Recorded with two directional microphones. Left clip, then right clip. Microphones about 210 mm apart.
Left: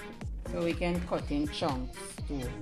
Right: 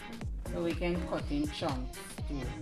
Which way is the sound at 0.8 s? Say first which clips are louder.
Left 2 dB; 30° left (ahead or behind).